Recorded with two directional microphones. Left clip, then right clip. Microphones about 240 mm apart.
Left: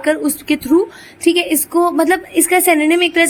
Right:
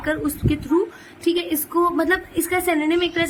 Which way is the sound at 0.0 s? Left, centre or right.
Left.